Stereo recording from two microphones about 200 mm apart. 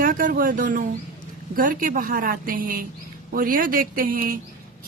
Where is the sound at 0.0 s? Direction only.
45° right (ahead or behind).